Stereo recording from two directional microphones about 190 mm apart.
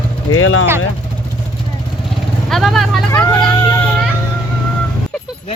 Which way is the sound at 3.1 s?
15° left (ahead or behind).